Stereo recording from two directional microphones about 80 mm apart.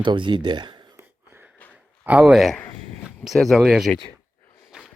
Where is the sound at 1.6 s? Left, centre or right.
Centre.